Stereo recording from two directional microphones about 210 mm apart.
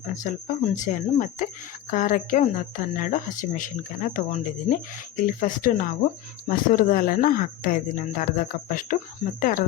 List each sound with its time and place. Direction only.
0.1 s speech: 35° left (ahead or behind)